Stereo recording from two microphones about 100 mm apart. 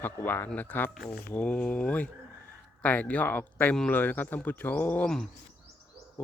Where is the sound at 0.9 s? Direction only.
5° right (ahead or behind).